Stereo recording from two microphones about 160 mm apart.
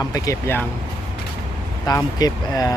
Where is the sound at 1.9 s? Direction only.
25° left (ahead or behind).